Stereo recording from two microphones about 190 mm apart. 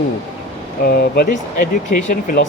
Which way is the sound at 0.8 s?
50° left (ahead or behind).